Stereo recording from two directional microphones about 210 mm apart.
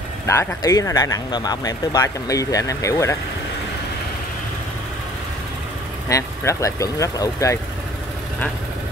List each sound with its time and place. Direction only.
0.3 s speech: 15° left (ahead or behind)
6.0 s speech: 15° left (ahead or behind)